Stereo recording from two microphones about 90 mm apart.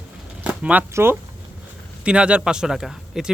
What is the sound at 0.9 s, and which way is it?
Speech, 25° right (ahead or behind).